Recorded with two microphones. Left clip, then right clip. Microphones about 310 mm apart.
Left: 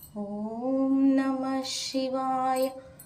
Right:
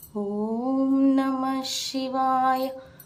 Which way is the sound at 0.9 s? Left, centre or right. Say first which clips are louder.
Right 3 dB; centre.